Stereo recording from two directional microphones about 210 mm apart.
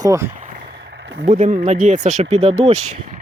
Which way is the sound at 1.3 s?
35° right (ahead or behind).